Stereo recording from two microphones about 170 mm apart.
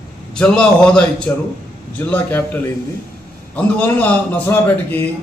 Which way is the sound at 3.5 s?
10° left (ahead or behind).